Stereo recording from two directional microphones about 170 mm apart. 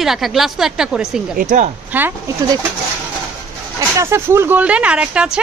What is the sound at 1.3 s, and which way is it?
Speech, 50° right (ahead or behind).